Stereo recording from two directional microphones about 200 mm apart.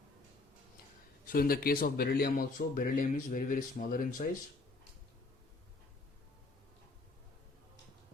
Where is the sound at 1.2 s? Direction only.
50° left (ahead or behind).